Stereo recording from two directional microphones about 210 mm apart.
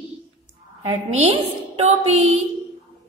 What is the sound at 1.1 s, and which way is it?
Speech, 30° right (ahead or behind).